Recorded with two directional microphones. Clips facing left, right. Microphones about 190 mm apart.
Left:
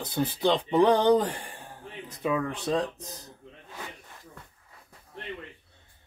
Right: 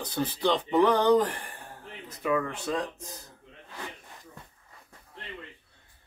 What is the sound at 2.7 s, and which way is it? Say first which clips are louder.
Speech: left 4 dB; 25° left (ahead or behind).